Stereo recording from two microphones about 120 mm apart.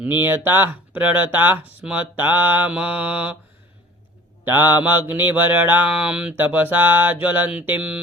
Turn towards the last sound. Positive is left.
turn(degrees=-10)  # may be behind; listen again after turning